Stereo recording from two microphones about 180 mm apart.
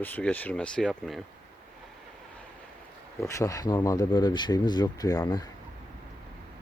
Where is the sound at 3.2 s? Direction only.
15° left (ahead or behind).